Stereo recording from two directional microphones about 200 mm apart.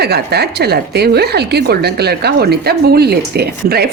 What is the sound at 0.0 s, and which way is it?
A woman's voice, 55° right (ahead or behind).